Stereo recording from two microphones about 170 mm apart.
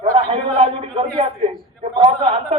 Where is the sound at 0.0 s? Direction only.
35° right (ahead or behind).